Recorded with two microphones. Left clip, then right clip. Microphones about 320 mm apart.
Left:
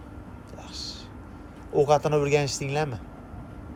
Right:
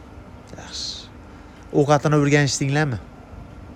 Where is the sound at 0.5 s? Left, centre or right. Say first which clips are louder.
Right 7 dB; right.